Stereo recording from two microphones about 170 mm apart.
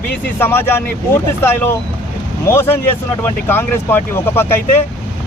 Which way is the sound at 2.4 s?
15° left (ahead or behind).